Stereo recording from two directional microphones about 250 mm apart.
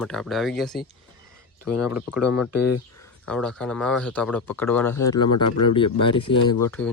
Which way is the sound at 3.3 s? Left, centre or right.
Centre.